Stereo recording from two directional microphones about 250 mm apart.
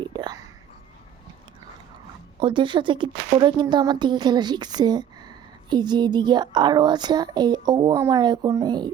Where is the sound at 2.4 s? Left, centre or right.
Centre.